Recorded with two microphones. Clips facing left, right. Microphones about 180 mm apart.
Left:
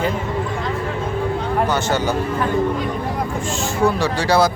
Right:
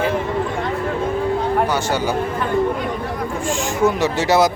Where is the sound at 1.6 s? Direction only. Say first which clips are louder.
Even; 10° right (ahead or behind).